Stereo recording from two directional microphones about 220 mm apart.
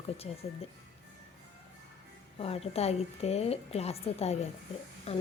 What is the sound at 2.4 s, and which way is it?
A woman's voice, 25° left (ahead or behind).